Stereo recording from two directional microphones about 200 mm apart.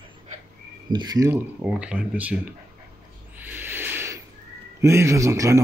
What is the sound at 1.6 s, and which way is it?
Speech, 5° right (ahead or behind).